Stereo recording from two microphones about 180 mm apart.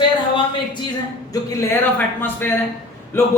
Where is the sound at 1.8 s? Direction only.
10° left (ahead or behind).